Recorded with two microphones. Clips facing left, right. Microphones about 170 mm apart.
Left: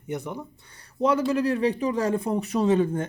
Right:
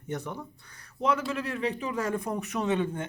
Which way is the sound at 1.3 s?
35° left (ahead or behind).